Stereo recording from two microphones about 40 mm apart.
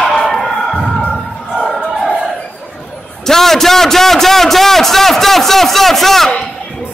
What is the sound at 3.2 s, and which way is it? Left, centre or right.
A man's voice, centre.